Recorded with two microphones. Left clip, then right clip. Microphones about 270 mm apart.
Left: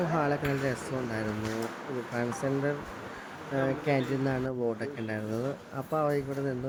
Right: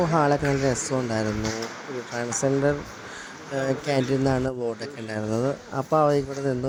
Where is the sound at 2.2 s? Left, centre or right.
Centre.